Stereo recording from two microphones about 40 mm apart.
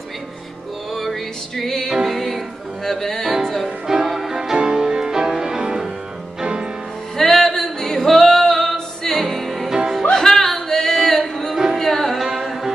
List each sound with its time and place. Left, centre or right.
1.6 s music: centre
3.6 s music: centre
7.2 s music: centre
10.1 s singing: centre
11.5 s music: centre
11.8 s music: centre
12.2 s music: centre